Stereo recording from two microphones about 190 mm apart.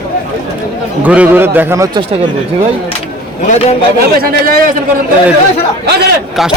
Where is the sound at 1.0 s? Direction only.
10° right (ahead or behind).